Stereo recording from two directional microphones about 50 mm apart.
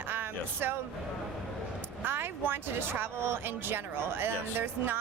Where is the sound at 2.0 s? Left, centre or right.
Right.